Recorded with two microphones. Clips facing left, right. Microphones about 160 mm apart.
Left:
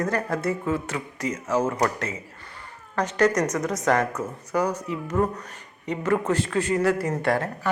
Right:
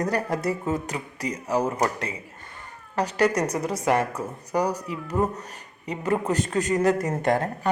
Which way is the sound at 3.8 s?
10° right (ahead or behind).